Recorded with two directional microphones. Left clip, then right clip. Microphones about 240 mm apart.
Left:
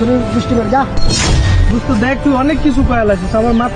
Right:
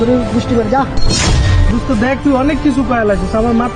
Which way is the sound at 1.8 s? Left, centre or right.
Centre.